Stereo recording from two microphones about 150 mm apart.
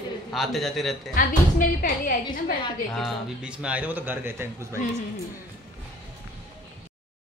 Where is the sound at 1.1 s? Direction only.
70° left (ahead or behind).